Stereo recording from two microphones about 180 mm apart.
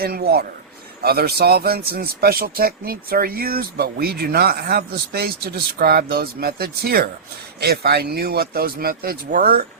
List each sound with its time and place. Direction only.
0.0 s a man's voice: 60° right (ahead or behind)